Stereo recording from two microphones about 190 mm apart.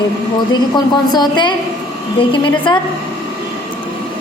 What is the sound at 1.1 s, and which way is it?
Speech, 25° left (ahead or behind).